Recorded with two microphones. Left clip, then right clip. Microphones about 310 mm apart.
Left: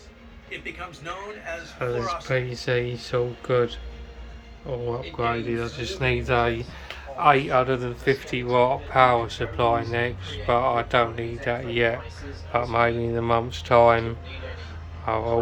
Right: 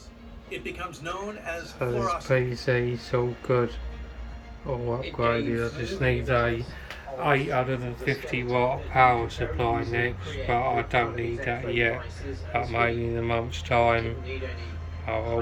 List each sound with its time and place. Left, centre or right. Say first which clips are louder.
0.6 s a man's voice: right 1 dB; right
2.2 s speech: right 1 dB; centre
4.9 s speech: right 1 dB; centre